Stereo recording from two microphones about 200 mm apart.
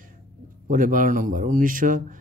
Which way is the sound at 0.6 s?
40° right (ahead or behind).